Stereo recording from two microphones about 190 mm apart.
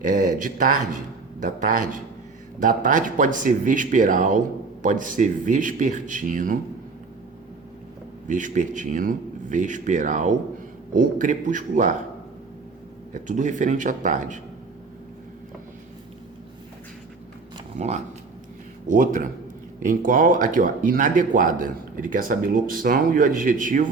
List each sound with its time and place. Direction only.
0.0 s speech: 40° right (ahead or behind)
8.3 s speech: 40° right (ahead or behind)
13.1 s speech: 40° right (ahead or behind)
17.7 s speech: 35° right (ahead or behind)